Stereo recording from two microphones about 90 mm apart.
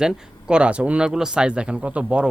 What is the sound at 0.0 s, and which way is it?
Speech, 10° right (ahead or behind).